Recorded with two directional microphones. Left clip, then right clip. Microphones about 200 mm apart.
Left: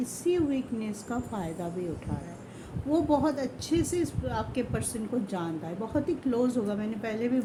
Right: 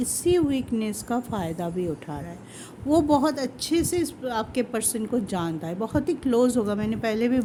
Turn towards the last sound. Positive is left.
turn(degrees=-55)  # may be behind; listen again after turning